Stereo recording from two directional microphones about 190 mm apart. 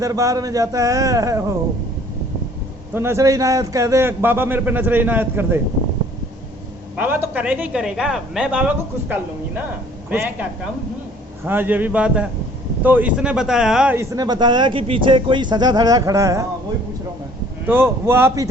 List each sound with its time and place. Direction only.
0.0 s a man's voice: 15° right (ahead or behind)
2.9 s a man's voice: 15° right (ahead or behind)
6.9 s a man's voice: 10° right (ahead or behind)
11.4 s a man's voice: 10° right (ahead or behind)
17.7 s a man's voice: 10° right (ahead or behind)